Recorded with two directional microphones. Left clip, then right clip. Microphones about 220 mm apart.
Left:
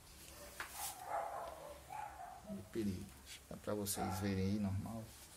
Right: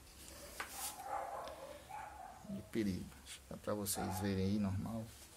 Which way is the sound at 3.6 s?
5° right (ahead or behind).